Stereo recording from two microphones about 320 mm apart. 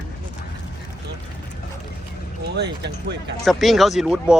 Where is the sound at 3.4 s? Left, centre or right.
Centre.